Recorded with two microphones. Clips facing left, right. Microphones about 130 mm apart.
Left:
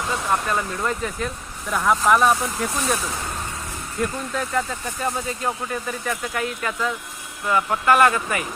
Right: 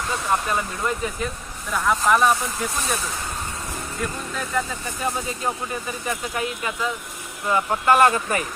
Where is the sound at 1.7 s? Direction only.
Centre (ahead or behind).